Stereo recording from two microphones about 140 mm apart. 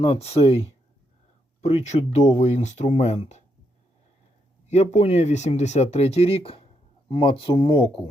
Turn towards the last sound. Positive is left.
turn(degrees=40)  # may be behind; listen again after turning